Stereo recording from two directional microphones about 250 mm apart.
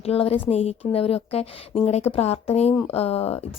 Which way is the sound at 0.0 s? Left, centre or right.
Left.